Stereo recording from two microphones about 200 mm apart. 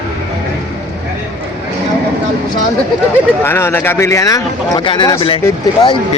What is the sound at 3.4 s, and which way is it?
Speech, 10° left (ahead or behind).